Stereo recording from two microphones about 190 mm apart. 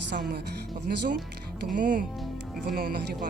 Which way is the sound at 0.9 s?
55° right (ahead or behind).